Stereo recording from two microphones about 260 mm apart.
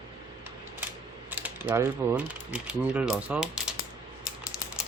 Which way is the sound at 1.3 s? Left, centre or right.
Centre.